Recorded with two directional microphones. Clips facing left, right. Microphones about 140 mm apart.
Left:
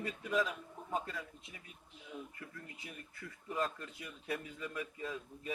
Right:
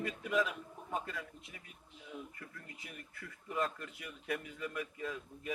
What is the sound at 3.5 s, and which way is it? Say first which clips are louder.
A man's voice: right 1 dB; 30° left (ahead or behind).